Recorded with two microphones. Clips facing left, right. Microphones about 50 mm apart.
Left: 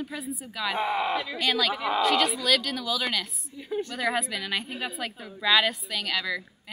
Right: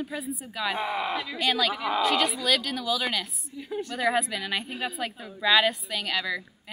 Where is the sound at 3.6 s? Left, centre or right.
Left.